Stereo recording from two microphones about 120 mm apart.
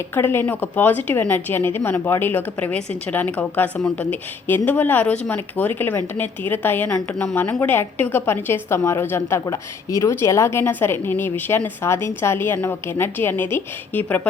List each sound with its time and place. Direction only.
0.1 s a woman's voice: 20° left (ahead or behind)